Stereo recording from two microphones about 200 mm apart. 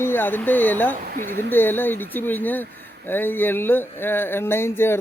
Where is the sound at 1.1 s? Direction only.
45° right (ahead or behind).